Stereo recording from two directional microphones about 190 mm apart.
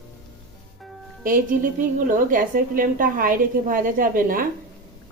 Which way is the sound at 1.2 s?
45° right (ahead or behind).